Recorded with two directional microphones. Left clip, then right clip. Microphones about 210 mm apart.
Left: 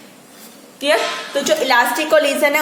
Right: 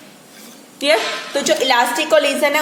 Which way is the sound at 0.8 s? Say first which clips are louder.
Right 1 dB; 25° right (ahead or behind).